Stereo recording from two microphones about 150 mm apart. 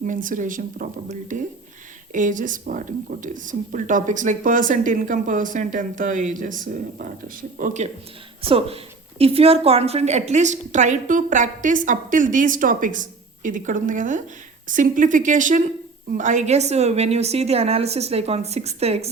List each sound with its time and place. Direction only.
0.0 s a woman's voice: 60° right (ahead or behind)
8.4 s a woman's voice: 40° right (ahead or behind)